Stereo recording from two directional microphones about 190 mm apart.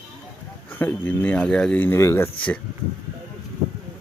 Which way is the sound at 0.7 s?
10° left (ahead or behind).